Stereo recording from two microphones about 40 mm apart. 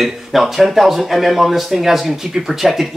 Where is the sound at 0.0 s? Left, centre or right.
Centre.